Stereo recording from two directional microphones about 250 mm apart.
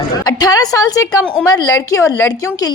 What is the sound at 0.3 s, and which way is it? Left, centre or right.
A woman's voice, centre.